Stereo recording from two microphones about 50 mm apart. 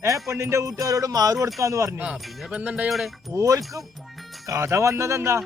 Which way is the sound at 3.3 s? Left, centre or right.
Right.